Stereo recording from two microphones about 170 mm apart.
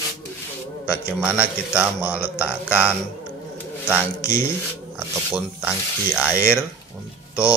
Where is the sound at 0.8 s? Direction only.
15° left (ahead or behind).